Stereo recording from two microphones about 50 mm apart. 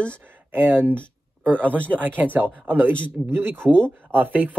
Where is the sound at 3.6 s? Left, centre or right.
Centre.